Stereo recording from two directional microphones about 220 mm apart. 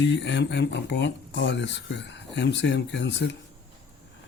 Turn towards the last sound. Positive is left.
turn(degrees=55)  # may be behind; listen again after turning